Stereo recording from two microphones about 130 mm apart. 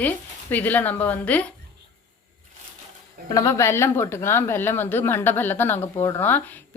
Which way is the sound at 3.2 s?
25° left (ahead or behind).